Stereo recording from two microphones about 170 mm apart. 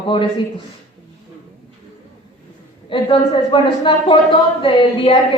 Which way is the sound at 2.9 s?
30° left (ahead or behind).